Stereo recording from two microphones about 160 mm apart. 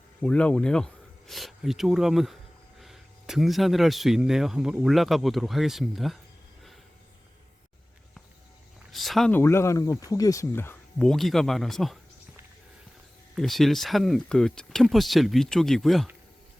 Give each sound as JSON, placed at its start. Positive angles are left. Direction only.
{"t": 0.2, "sound": "speech", "side_deg": 5}
{"t": 8.9, "sound": "a sound", "side_deg": 0}
{"t": 9.3, "sound": "speech", "side_deg": 15}
{"t": 13.3, "sound": "speech", "side_deg": 0}